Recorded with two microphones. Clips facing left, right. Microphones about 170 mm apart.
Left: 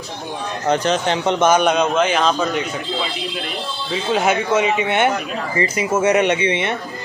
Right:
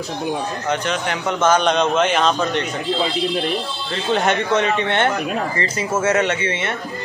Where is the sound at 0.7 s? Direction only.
30° left (ahead or behind).